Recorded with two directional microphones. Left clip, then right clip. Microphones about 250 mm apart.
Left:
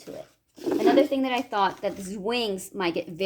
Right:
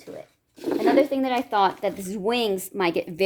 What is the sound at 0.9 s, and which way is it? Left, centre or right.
Speech, centre.